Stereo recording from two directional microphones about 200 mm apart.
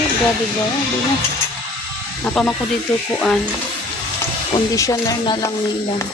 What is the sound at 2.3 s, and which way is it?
Speech, 5° left (ahead or behind).